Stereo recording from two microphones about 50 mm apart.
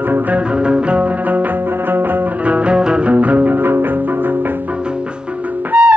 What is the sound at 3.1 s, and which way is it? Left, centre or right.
Music, right.